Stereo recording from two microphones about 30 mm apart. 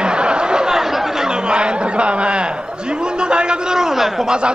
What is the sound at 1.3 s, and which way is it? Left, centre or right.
Speech, right.